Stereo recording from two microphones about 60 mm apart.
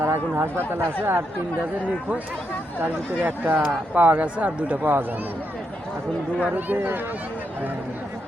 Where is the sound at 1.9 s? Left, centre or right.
Right.